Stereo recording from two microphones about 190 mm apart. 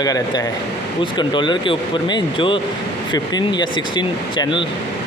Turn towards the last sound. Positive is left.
turn(degrees=25)  # may be behind; listen again after turning